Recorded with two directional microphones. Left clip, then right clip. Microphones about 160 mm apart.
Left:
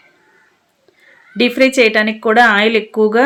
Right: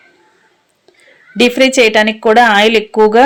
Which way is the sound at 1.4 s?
15° right (ahead or behind).